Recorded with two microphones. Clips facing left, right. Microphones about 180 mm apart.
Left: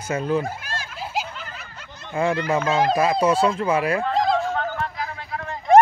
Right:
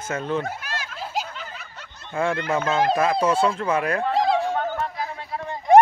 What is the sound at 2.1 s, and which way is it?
Speech, 5° left (ahead or behind).